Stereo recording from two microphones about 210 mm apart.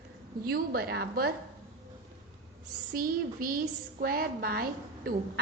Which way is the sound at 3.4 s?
40° right (ahead or behind).